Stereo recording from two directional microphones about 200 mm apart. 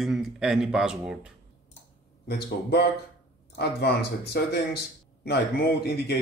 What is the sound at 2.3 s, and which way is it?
Speech, 55° left (ahead or behind).